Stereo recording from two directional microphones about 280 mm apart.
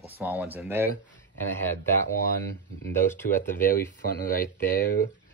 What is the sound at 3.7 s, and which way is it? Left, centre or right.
Speech, left.